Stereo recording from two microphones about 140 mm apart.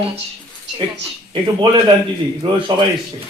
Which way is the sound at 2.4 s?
30° right (ahead or behind).